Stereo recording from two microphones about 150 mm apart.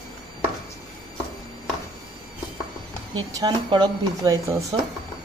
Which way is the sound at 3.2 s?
30° right (ahead or behind).